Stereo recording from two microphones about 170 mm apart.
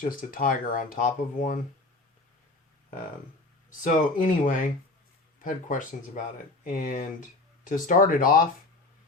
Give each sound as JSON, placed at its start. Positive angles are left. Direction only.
{"t": 0.0, "sound": "speech", "side_deg": 55}
{"t": 3.7, "sound": "speech", "side_deg": 50}